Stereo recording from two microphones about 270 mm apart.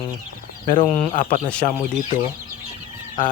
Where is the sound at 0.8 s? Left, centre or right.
Left.